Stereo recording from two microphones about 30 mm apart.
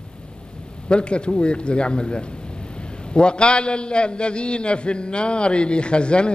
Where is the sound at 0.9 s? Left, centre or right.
Left.